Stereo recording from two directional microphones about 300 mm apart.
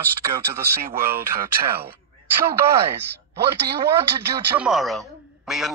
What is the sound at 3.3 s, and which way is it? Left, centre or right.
Speech, right.